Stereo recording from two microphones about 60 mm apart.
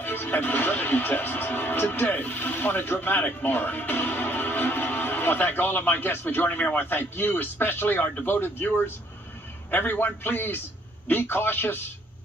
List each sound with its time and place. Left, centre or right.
0.0 s a man's voice: left